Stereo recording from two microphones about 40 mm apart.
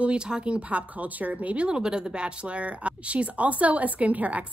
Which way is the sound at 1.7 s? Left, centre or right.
Centre.